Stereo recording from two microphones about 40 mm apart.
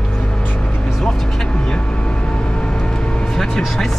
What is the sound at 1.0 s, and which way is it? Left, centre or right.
Vehicle, centre.